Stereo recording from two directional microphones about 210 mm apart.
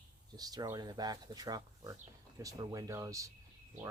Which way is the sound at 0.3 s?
20° right (ahead or behind).